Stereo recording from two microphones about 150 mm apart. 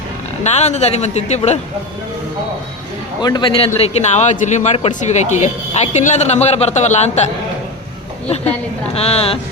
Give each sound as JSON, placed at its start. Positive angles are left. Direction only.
{"t": 0.4, "sound": "a man's voice", "side_deg": 50}
{"t": 3.2, "sound": "a man's voice", "side_deg": 30}
{"t": 9.0, "sound": "a man's voice", "side_deg": 40}